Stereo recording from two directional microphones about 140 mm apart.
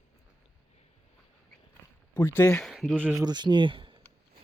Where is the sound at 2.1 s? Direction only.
15° left (ahead or behind).